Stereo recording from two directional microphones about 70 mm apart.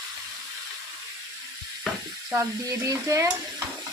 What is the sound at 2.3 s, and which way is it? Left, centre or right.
Stir, right.